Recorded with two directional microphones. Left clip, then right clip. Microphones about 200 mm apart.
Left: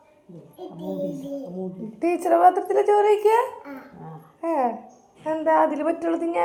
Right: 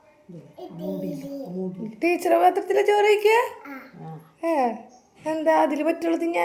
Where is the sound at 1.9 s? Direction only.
30° right (ahead or behind).